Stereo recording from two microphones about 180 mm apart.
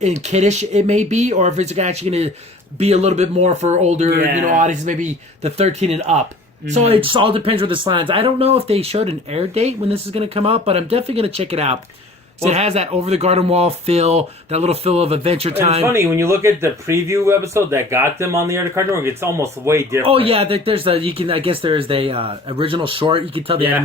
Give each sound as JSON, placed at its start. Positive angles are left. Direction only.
{"t": 0.0, "sound": "speech", "side_deg": -40}
{"t": 15.9, "sound": "speech", "side_deg": -15}
{"t": 20.1, "sound": "speech", "side_deg": -30}